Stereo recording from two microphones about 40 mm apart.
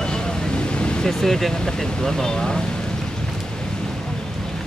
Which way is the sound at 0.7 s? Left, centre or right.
Left.